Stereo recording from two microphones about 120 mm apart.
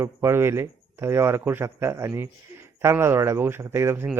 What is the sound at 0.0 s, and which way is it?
Speech, 20° right (ahead or behind).